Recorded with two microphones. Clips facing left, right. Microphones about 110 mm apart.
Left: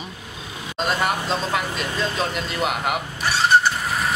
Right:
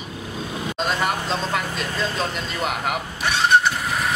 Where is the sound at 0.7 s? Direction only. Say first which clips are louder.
Left 2 dB; centre (ahead or behind).